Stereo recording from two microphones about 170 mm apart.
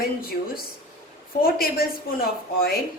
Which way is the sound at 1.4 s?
60° left (ahead or behind).